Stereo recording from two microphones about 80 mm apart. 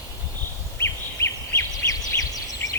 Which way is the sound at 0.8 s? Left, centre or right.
Left.